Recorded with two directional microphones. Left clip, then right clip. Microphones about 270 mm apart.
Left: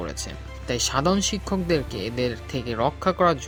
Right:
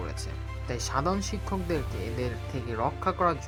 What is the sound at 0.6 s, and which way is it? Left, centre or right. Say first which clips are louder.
Speech: left 7 dB; left.